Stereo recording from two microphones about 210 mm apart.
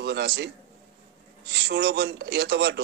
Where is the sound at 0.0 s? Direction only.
55° right (ahead or behind).